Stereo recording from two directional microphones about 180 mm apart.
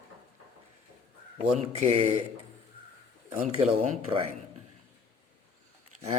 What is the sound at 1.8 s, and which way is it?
Speech, 35° right (ahead or behind).